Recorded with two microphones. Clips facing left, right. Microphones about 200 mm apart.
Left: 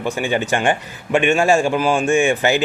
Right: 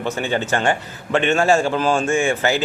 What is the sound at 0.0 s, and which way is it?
A man's voice, 15° left (ahead or behind).